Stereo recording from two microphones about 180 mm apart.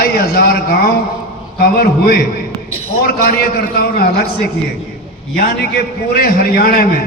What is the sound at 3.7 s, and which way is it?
Speech, 60° left (ahead or behind).